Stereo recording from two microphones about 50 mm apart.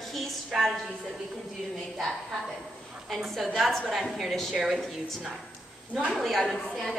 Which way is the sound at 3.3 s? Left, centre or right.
Centre.